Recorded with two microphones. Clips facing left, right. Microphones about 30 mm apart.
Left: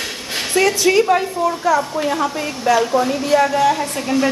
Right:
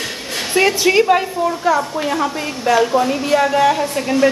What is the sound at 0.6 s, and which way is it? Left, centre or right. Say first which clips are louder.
A woman's voice: right 1 dB; centre.